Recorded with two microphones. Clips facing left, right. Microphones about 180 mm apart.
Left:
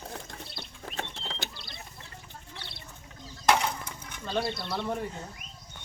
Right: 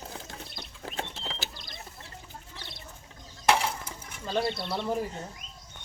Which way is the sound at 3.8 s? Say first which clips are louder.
Right 1 dB; 5° right (ahead or behind).